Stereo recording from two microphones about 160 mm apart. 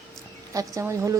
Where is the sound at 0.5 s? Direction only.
20° right (ahead or behind).